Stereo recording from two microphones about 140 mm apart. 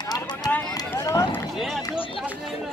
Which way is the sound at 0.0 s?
30° left (ahead or behind).